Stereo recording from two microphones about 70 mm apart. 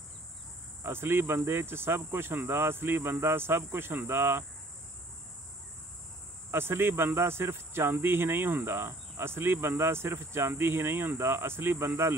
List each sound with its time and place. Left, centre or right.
0.8 s speech: right
6.5 s speech: right